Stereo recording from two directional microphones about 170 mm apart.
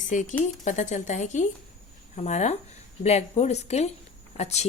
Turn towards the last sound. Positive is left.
turn(degrees=40)  # may be behind; listen again after turning